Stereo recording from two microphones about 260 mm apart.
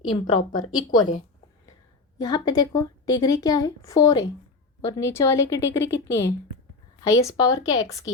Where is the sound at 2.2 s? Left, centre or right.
Centre.